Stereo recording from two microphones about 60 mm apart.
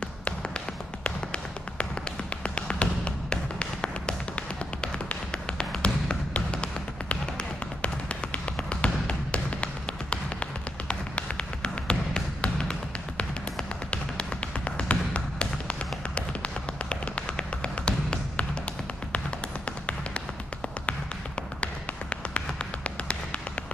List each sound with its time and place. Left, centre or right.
1.0 s tap: centre
2.4 s music: centre
4.8 s tap: centre
8.5 s music: centre
22.8 s music: centre